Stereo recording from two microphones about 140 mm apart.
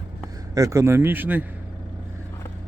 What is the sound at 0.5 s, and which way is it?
Speech, 25° right (ahead or behind).